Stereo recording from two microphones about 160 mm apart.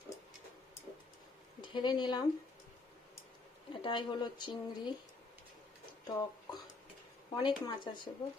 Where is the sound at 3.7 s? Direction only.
30° left (ahead or behind).